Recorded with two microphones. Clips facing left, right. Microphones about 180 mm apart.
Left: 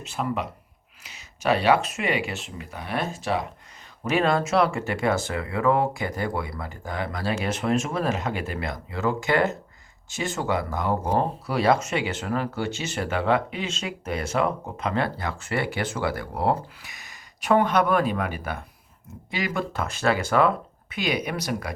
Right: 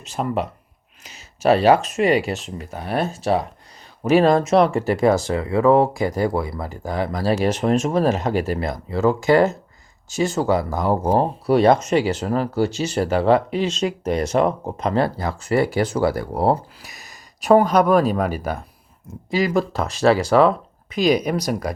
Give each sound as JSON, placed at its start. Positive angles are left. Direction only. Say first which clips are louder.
{"t": 0.0, "sound": "speech", "louder": "right 4 dB", "side_deg": -40}